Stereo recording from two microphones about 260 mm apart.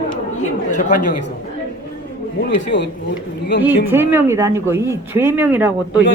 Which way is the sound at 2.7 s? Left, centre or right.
Left.